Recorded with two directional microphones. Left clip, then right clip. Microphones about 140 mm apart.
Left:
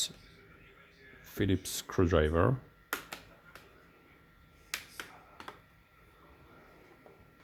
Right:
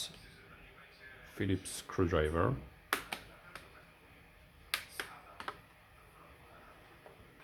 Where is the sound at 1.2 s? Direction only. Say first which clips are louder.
Left 5 dB; 90° left.